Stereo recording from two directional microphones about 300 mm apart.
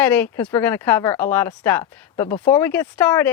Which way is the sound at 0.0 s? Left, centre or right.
Centre.